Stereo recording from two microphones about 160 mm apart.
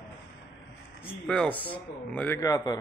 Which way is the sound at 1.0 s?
5° left (ahead or behind).